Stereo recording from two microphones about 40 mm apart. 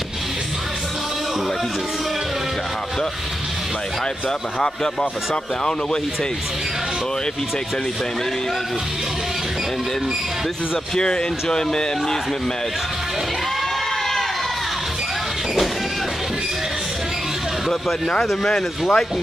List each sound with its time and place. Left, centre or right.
11.0 s speech: centre
18.2 s speech: centre